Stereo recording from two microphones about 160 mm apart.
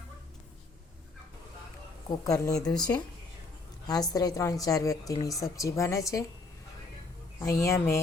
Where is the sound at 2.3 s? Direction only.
20° left (ahead or behind).